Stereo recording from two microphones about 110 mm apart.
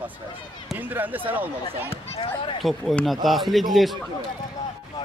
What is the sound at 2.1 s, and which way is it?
Speech, 60° left (ahead or behind).